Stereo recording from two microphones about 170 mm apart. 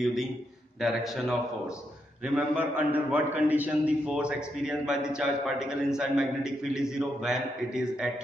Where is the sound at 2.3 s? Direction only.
10° right (ahead or behind).